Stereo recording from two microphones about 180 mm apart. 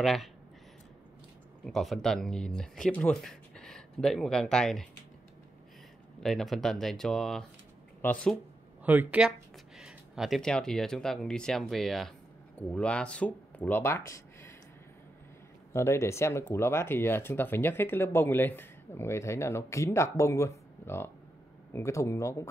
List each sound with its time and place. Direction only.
0.0 s speech: centre (ahead or behind)
1.6 s speech: centre (ahead or behind)
6.2 s speech: centre (ahead or behind)
8.8 s speech: 10° right (ahead or behind); by 14.5 s 15° left (ahead or behind)
15.7 s speech: 15° left (ahead or behind)